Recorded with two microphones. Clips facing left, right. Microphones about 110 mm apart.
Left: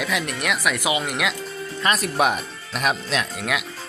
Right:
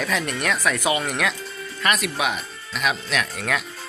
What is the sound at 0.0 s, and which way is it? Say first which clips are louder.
Speech: right 1 dB; 10° left (ahead or behind).